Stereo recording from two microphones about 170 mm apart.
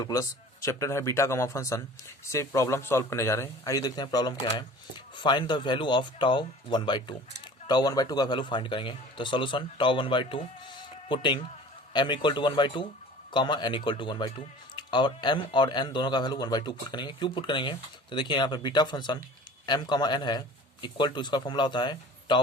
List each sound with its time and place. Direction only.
0.0 s speech: 20° left (ahead or behind)